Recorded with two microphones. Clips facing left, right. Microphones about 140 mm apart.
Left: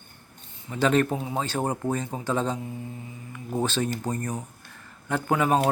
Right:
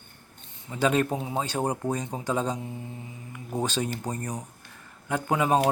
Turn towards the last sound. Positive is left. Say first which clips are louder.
# left 1 dB
turn(degrees=-15)  # may be behind; listen again after turning